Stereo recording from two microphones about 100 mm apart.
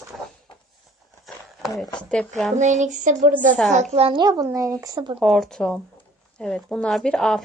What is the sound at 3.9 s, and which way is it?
Speech, 85° right.